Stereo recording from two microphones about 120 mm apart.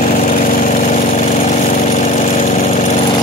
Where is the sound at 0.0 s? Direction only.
90° left.